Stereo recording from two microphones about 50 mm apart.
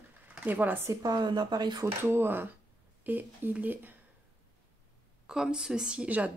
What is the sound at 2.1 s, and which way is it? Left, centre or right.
Speech, right.